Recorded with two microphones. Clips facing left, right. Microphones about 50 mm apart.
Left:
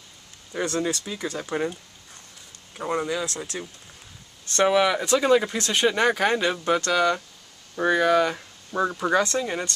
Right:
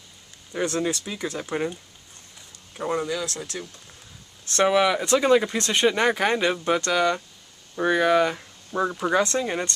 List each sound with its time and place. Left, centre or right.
0.5 s speech: centre
2.8 s speech: centre
3.1 s speech: left
4.5 s speech: centre
8.4 s a sound: centre
9.0 s speech: centre